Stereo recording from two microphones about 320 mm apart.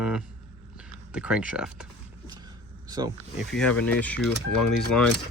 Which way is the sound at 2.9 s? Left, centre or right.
Centre.